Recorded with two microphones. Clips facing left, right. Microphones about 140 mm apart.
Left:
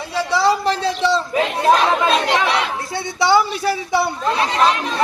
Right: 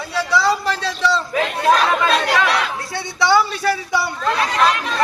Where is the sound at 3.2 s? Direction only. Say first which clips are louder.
Even; 15° left (ahead or behind).